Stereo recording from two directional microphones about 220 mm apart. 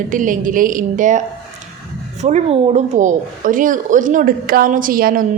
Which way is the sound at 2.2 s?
30° right (ahead or behind).